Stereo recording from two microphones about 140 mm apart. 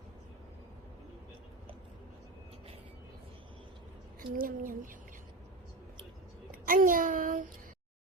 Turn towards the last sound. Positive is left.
turn(degrees=-70)  # may be behind; listen again after turning